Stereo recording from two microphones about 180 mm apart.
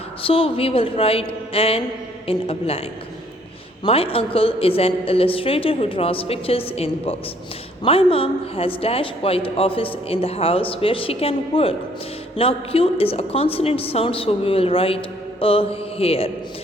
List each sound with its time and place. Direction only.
0.2 s a woman's voice: 30° left (ahead or behind)
3.8 s a woman's voice: 30° left (ahead or behind)